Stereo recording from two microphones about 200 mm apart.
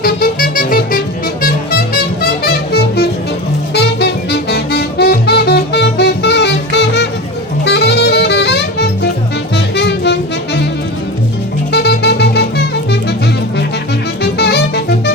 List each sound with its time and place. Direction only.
0.0 s music: 45° left (ahead or behind)
7.6 s saxophone: 55° left (ahead or behind)
9.6 s music: 55° left (ahead or behind)
11.7 s music: 55° left (ahead or behind)
14.2 s music: 55° left (ahead or behind)